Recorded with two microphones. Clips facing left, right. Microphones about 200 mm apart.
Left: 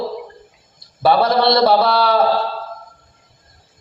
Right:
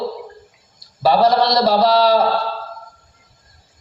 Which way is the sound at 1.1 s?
55° left (ahead or behind).